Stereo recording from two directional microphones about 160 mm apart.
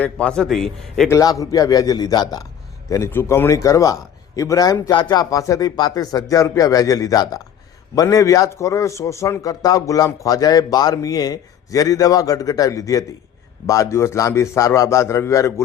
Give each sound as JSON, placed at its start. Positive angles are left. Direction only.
{"t": 0.0, "sound": "a man's voice", "side_deg": 5}
{"t": 1.1, "sound": "a man's voice", "side_deg": 20}